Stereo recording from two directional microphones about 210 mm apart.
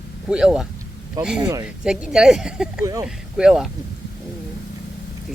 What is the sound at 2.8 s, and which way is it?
Speech, 15° right (ahead or behind).